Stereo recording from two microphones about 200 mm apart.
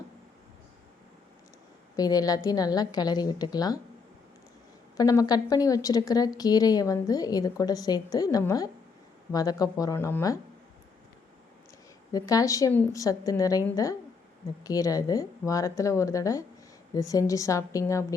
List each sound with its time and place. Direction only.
2.0 s a woman's voice: 20° left (ahead or behind)
4.9 s a woman's voice: 20° left (ahead or behind)
12.1 s speech: 20° left (ahead or behind)